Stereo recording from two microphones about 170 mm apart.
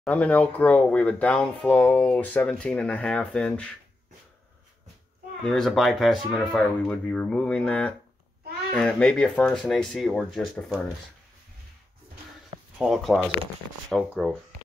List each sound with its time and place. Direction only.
0.0 s speech: 10° left (ahead or behind)
5.4 s speech: centre (ahead or behind)
12.7 s speech: centre (ahead or behind)